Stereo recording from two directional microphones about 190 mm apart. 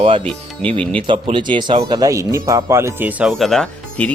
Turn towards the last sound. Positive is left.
turn(degrees=0)  # may be behind; listen again after turning